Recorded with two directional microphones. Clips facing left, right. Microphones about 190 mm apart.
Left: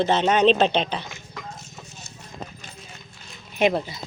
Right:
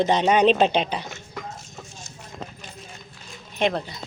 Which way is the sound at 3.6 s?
5° left (ahead or behind).